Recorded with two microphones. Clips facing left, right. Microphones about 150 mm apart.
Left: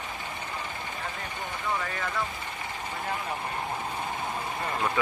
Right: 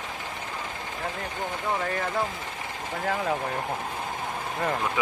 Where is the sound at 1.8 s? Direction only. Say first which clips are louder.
Right 4 dB; 40° right (ahead or behind).